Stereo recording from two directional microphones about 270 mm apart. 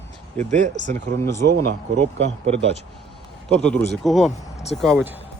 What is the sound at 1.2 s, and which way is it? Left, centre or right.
Speech, centre.